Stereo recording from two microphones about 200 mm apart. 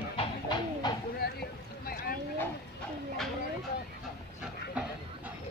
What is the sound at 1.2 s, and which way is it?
Boat, 55° left (ahead or behind).